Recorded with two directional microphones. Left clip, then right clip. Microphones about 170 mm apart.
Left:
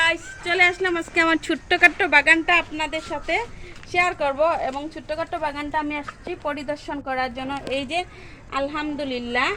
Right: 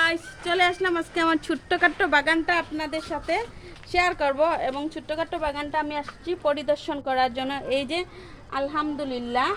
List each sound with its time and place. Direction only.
0.0 s a woman's voice: 15° right (ahead or behind)
3.9 s speech: 30° right (ahead or behind)
8.4 s a woman's voice: 10° right (ahead or behind)